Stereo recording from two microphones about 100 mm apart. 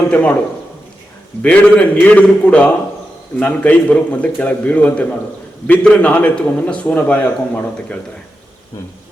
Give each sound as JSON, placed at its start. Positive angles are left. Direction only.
{"t": 0.1, "sound": "a man's voice", "side_deg": 15}
{"t": 1.4, "sound": "a man's voice", "side_deg": 10}